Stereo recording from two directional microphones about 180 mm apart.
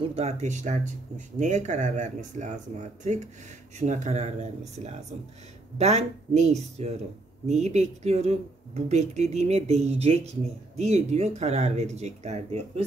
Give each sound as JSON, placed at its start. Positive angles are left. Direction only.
{"t": 0.0, "sound": "speech", "side_deg": -35}